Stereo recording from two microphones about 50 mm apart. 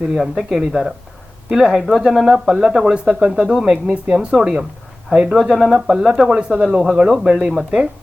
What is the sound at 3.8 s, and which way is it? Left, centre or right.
Speech, right.